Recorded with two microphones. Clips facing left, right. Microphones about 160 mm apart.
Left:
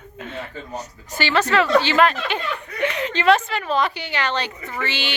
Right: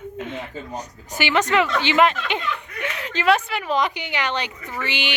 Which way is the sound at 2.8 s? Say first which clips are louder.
Left 3 dB; 5° right (ahead or behind).